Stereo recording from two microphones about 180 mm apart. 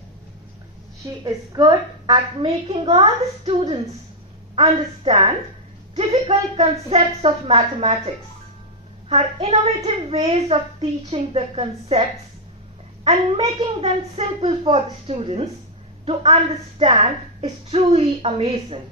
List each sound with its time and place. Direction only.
1.0 s a woman's voice: 20° right (ahead or behind)
9.1 s a woman's voice: 35° right (ahead or behind)